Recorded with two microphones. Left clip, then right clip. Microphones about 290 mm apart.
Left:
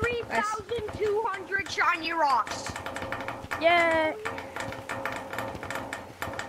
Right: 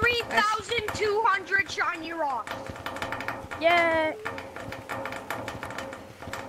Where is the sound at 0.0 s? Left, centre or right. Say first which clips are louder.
Right 4 dB; right.